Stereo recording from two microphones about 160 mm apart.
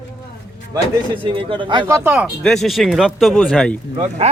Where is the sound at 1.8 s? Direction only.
15° right (ahead or behind).